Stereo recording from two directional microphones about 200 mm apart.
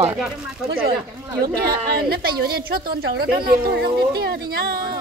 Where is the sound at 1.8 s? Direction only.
50° right (ahead or behind).